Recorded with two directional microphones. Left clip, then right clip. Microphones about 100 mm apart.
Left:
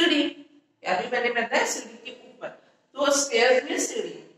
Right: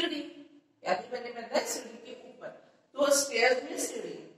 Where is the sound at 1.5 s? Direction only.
45° left (ahead or behind).